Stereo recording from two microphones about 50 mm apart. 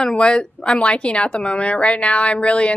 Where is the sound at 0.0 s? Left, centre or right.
Centre.